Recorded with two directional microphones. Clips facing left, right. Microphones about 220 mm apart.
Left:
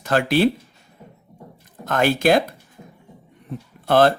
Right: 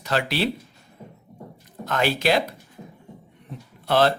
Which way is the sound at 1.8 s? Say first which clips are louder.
Left 4 dB; 50° left (ahead or behind).